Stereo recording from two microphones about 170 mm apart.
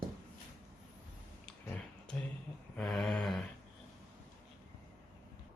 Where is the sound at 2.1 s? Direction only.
5° left (ahead or behind).